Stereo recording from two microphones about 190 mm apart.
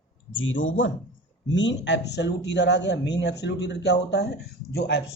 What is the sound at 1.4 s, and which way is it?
Speech, 70° left (ahead or behind).